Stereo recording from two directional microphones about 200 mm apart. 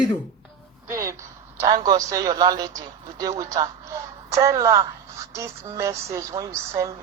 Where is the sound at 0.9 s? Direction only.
15° right (ahead or behind).